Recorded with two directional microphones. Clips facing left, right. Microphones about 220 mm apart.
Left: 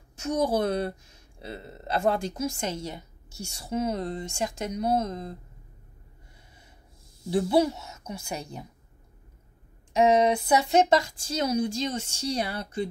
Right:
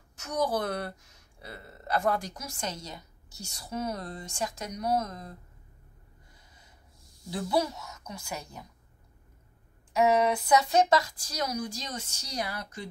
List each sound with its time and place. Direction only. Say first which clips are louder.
0.1 s a woman's voice: left 4 dB; 25° left (ahead or behind)
7.2 s a woman's voice: left 6 dB; 25° left (ahead or behind)
9.9 s a woman's voice: left 3 dB; 25° left (ahead or behind)